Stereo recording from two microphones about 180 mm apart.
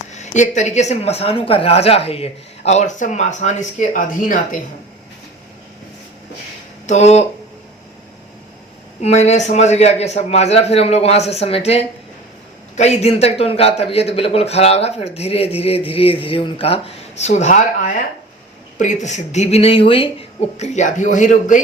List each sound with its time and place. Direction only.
0.1 s a man's voice: 40° left (ahead or behind)
6.8 s a man's voice: 40° left (ahead or behind)
9.0 s a man's voice: 40° left (ahead or behind)
20.6 s speech: 40° left (ahead or behind)